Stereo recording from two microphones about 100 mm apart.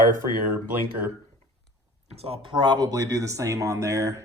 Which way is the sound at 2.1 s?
80° right.